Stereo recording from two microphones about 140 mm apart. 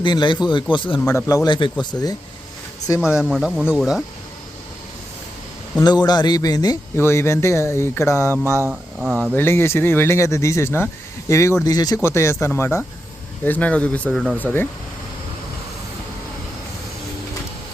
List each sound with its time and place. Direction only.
0.0 s a man's voice: 35° left (ahead or behind)
1.0 s speech: 25° left (ahead or behind)
1.5 s a man's voice: 35° left (ahead or behind)
3.0 s speech: 5° right (ahead or behind)
5.8 s speech: 30° left (ahead or behind)
6.9 s speech: 20° left (ahead or behind)
8.7 s speech: 5° right (ahead or behind)
9.3 s speech: 15° left (ahead or behind)